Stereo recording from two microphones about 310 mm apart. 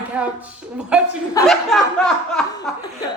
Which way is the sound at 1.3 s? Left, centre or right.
Centre.